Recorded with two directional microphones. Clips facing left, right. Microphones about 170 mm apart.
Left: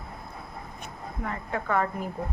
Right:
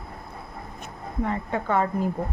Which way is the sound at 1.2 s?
30° right (ahead or behind).